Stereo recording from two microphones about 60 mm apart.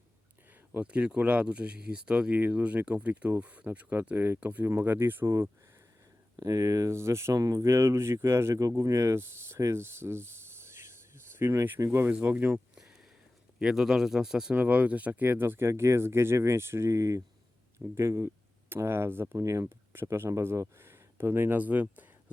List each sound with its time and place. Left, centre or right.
0.8 s speech: centre
2.3 s speech: right
6.3 s speech: right
7.3 s speech: right
7.6 s speech: right
8.8 s speech: right
12.2 s speech: right
12.5 s a sound: centre
13.6 s speech: centre
14.5 s speech: right
17.8 s speech: right
19.4 s speech: right
19.9 s speech: right
21.6 s speech: right